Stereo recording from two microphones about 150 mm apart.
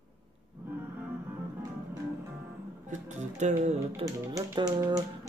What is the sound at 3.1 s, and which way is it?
Speech, 50° right (ahead or behind).